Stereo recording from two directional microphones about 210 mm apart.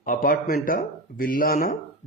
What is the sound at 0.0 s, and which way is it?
Speech, 40° left (ahead or behind).